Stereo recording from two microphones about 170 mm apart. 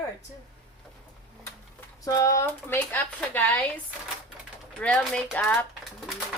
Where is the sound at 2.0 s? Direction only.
20° left (ahead or behind).